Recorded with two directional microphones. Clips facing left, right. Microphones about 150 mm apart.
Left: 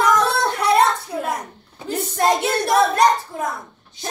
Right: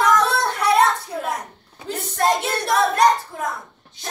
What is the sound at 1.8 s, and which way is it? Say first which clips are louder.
A child's voice: left 2 dB; 5° left (ahead or behind).